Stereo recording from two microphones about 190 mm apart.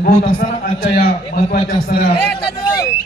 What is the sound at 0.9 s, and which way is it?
A man's voice, 55° left (ahead or behind).